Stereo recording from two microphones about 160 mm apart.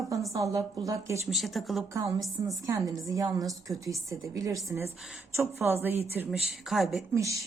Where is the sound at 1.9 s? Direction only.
20° right (ahead or behind).